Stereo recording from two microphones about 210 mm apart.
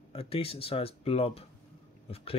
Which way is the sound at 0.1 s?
25° left (ahead or behind).